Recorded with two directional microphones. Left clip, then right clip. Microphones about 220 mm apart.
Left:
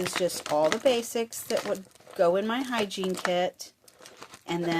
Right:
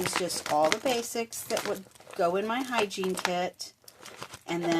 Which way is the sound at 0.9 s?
30° left (ahead or behind).